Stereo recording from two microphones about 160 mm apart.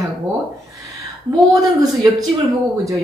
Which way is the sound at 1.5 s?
20° right (ahead or behind).